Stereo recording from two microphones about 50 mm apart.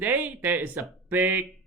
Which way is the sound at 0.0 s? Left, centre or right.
Right.